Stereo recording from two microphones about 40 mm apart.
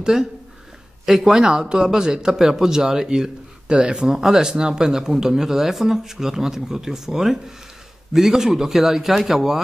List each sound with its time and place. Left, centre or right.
0.0 s a man's voice: centre